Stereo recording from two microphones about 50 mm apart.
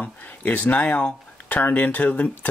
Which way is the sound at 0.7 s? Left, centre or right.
Left.